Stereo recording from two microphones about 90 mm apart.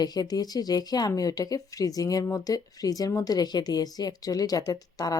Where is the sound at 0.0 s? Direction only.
50° left (ahead or behind).